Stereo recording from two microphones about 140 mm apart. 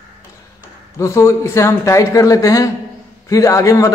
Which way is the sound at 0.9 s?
20° left (ahead or behind).